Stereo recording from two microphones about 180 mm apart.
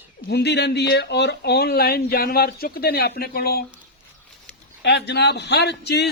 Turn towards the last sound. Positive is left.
turn(degrees=65)  # may be behind; listen again after turning